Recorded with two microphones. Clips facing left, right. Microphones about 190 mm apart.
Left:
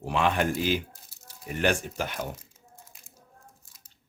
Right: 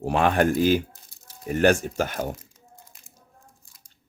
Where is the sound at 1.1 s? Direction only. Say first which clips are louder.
Left 2 dB; 5° left (ahead or behind).